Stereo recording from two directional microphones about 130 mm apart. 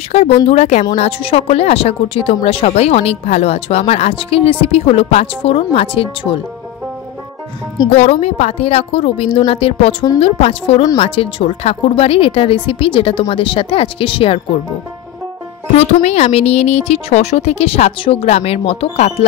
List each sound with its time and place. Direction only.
0.1 s speech: 55° left (ahead or behind)
7.9 s speech: 50° left (ahead or behind)
15.8 s speech: 55° left (ahead or behind)